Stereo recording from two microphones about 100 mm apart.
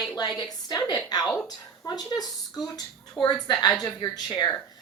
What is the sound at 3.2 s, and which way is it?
Speech, 45° left (ahead or behind).